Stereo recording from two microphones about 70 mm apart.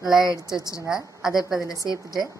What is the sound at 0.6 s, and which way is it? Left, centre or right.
Speech, left.